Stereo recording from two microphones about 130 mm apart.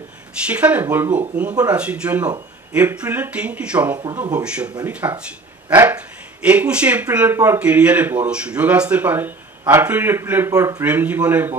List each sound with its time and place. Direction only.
0.5 s speech: 10° right (ahead or behind)
0.8 s speech: 20° right (ahead or behind)
1.7 s speech: 10° right (ahead or behind)
4.1 s speech: 25° right (ahead or behind)
4.5 s speech: 10° right (ahead or behind)
5.0 s speech: 20° right (ahead or behind)
10.8 s speech: 15° right (ahead or behind)